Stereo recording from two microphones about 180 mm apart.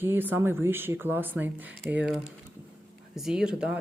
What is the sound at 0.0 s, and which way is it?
Speech, 10° right (ahead or behind).